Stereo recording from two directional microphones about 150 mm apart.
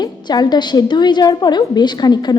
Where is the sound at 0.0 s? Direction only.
25° left (ahead or behind).